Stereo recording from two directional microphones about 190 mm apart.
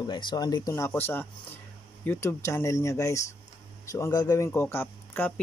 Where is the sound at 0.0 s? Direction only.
25° left (ahead or behind).